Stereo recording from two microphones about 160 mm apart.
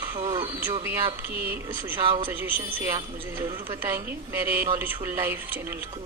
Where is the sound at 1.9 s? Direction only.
35° right (ahead or behind).